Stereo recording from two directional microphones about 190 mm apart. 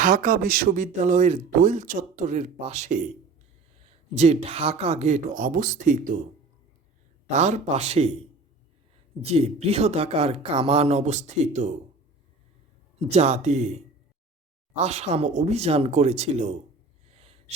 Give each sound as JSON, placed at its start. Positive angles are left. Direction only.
{"t": 0.0, "sound": "speech", "side_deg": -50}
{"t": 4.1, "sound": "speech", "side_deg": -35}
{"t": 7.3, "sound": "speech", "side_deg": -40}
{"t": 9.3, "sound": "speech", "side_deg": -30}
{"t": 13.1, "sound": "speech", "side_deg": -35}
{"t": 14.8, "sound": "speech", "side_deg": -35}